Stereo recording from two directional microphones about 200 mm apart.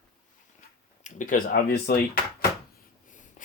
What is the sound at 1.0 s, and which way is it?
Speech, 40° left (ahead or behind).